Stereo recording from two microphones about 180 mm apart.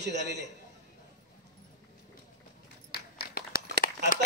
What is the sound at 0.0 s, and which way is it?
Speech, 70° right (ahead or behind).